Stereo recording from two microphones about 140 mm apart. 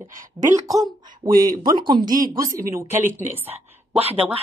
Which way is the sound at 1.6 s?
30° right (ahead or behind).